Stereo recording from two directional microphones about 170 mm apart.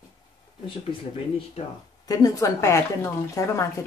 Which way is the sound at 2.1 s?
20° left (ahead or behind).